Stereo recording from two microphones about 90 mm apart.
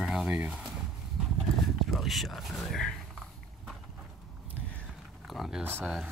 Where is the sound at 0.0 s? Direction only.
5° right (ahead or behind).